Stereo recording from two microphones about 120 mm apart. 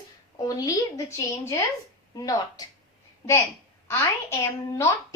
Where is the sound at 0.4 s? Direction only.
30° left (ahead or behind).